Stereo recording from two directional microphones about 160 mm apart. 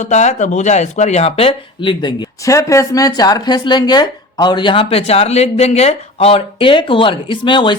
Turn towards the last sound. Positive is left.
turn(degrees=30)  # may be behind; listen again after turning